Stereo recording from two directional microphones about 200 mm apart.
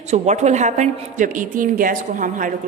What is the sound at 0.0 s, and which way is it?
A woman's voice, 35° right (ahead or behind).